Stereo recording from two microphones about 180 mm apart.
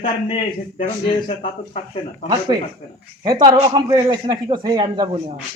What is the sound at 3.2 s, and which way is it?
Speech, 25° right (ahead or behind).